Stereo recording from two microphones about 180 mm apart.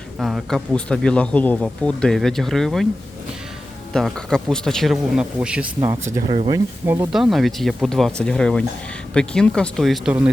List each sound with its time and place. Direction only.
0.2 s speech: centre (ahead or behind)
3.9 s speech: 5° left (ahead or behind)
5.9 s speech: 20° right (ahead or behind)
6.2 s speech: 30° right (ahead or behind)
6.8 s speech: 15° right (ahead or behind)
7.1 s speech: centre (ahead or behind)